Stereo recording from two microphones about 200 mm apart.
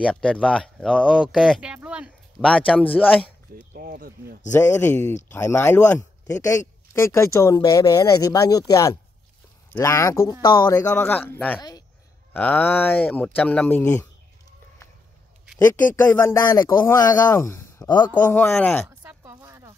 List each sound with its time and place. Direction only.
0.0 s speech: 5° left (ahead or behind)
2.5 s speech: 5° left (ahead or behind)
3.7 s speech: 50° right (ahead or behind)
4.5 s speech: 10° left (ahead or behind)
15.7 s speech: 10° left (ahead or behind)
18.1 s speech: 10° left (ahead or behind)
18.9 s a sound: 10° right (ahead or behind)